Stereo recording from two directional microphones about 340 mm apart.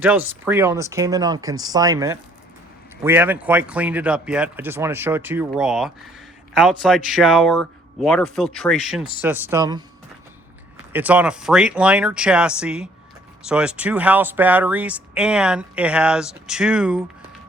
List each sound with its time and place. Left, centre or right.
0.0 s speech: centre
10.9 s speech: centre